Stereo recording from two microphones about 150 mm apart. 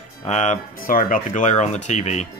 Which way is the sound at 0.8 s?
70° left (ahead or behind).